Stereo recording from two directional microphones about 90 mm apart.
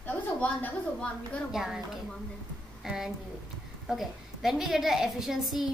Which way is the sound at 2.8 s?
5° right (ahead or behind).